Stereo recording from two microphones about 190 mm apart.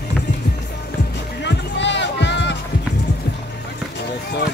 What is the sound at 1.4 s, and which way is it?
Music, 70° left (ahead or behind).